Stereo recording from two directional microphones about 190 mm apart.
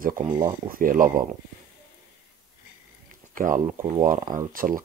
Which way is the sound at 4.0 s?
40° right (ahead or behind).